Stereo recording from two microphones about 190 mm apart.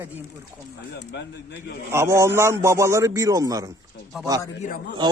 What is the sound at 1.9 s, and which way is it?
A man's voice, 15° right (ahead or behind).